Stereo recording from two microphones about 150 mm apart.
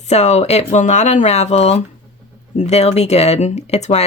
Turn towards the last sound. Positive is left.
turn(degrees=45)  # may be behind; listen again after turning